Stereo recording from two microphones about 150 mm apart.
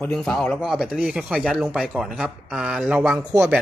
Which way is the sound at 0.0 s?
5° left (ahead or behind).